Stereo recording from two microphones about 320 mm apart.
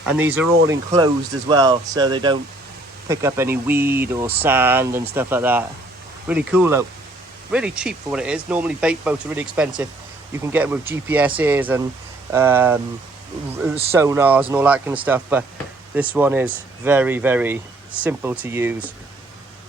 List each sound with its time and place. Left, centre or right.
0.0 s speech: centre